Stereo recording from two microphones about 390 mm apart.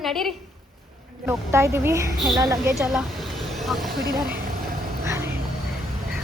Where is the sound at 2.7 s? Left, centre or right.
Centre.